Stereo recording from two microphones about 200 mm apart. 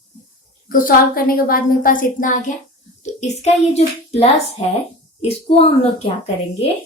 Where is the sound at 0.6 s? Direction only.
45° left (ahead or behind).